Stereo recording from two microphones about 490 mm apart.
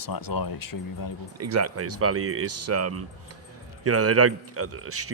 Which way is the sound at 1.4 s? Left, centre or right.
Right.